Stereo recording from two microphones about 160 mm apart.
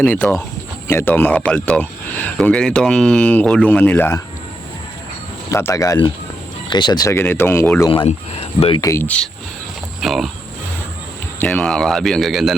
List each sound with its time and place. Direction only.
0.0 s speech: 10° left (ahead or behind)
5.5 s speech: 15° left (ahead or behind)
7.9 s speech: 30° left (ahead or behind)
8.8 s speech: 15° left (ahead or behind); by 10.2 s centre (ahead or behind)
11.3 s speech: 5° left (ahead or behind)